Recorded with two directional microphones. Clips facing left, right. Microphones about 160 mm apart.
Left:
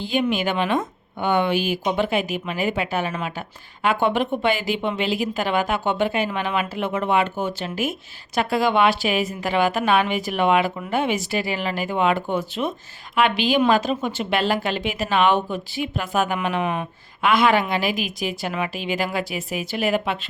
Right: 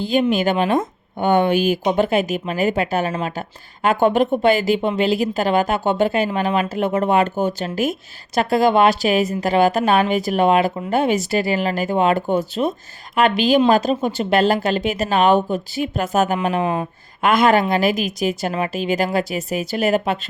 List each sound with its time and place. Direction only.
0.0 s a woman's voice: 40° right (ahead or behind)
17.2 s a woman's voice: 45° right (ahead or behind)